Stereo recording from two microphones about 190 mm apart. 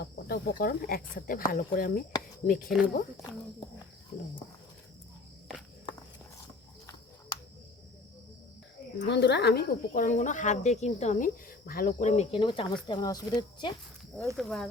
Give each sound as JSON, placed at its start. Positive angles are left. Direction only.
{"t": 0.0, "sound": "speech", "side_deg": 55}
{"t": 9.0, "sound": "speech", "side_deg": 65}
{"t": 14.3, "sound": "speech", "side_deg": 0}